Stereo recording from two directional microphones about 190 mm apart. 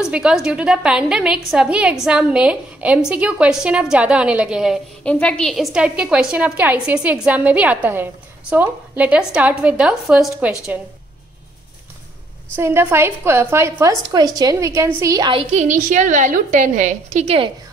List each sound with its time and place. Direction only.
0.0 s a woman's voice: 5° right (ahead or behind)
12.5 s a woman's voice: 15° right (ahead or behind)
15.5 s a woman's voice: 40° right (ahead or behind)